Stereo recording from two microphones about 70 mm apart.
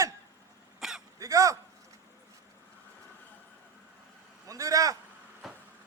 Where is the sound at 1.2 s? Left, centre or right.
Right.